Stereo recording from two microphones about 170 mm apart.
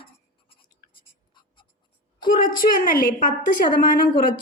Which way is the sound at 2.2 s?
55° left (ahead or behind).